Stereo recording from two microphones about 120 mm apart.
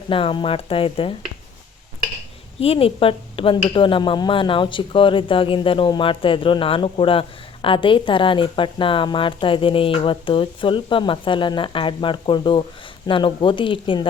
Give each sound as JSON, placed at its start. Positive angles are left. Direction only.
{"t": 0.1, "sound": "speech", "side_deg": 45}
{"t": 2.6, "sound": "speech", "side_deg": 55}